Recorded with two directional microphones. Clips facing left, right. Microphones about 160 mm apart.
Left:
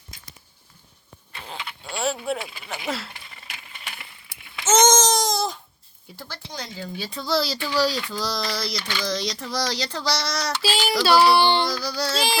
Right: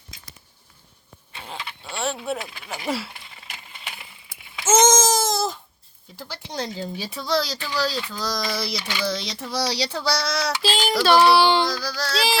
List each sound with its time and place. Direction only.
1.4 s a sound: centre (ahead or behind)
2.6 s a sound: 10° right (ahead or behind)
6.5 s speech: 30° right (ahead or behind)
6.9 s speech: 15° right (ahead or behind)
7.2 s speech: 5° left (ahead or behind)
11.3 s speech: 5° right (ahead or behind)
11.7 s speech: 15° left (ahead or behind)